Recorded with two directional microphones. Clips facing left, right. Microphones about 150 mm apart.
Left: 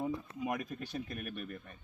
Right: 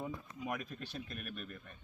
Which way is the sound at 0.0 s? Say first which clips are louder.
Left 6 dB; 20° left (ahead or behind).